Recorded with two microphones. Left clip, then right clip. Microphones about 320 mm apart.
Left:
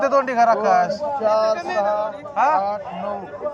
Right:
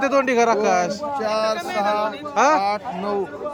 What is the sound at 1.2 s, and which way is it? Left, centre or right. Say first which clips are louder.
Speech: left 4 dB; right.